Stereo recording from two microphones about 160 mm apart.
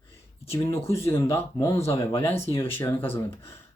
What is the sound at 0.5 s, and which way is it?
Speech, 15° left (ahead or behind).